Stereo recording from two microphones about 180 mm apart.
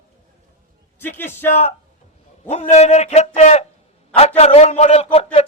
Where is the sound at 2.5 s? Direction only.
40° left (ahead or behind).